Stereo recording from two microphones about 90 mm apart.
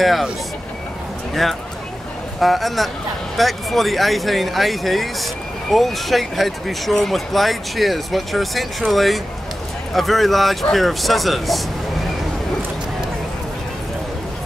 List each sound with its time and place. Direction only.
0.0 s speech: centre (ahead or behind)
1.3 s speech: centre (ahead or behind)